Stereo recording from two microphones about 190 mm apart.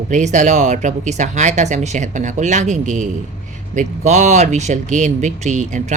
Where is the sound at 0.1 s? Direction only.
40° right (ahead or behind).